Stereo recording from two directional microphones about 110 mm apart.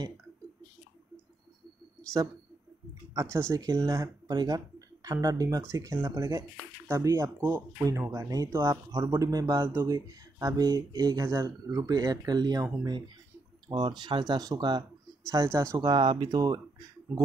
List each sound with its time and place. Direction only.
3.2 s speech: 25° right (ahead or behind)
9.9 s speech: 35° right (ahead or behind)
13.7 s speech: 40° right (ahead or behind)
15.2 s speech: 25° right (ahead or behind)
15.9 s speech: 40° right (ahead or behind)
17.1 s speech: 10° right (ahead or behind)